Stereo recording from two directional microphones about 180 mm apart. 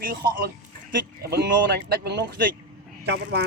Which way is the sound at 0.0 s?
55° right (ahead or behind).